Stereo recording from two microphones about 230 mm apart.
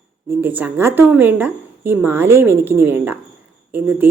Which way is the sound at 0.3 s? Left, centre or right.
Centre.